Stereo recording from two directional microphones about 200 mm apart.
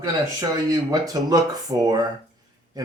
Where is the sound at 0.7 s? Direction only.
20° right (ahead or behind).